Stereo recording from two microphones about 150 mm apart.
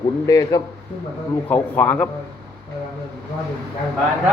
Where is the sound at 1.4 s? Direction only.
10° left (ahead or behind).